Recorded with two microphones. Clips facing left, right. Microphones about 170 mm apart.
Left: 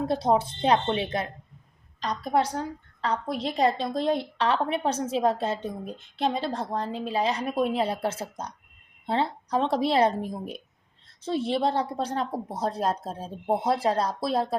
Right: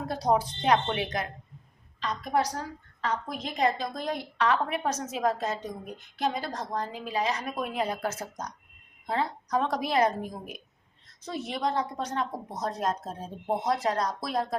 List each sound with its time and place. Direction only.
0.0 s a woman's voice: 25° left (ahead or behind)